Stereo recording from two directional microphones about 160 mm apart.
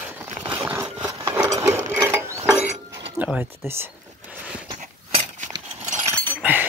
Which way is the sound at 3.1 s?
10° right (ahead or behind).